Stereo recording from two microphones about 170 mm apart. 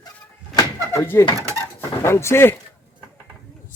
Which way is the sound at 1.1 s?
15° left (ahead or behind).